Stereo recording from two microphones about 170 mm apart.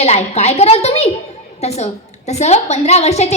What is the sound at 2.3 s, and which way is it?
A woman's voice, 40° left (ahead or behind).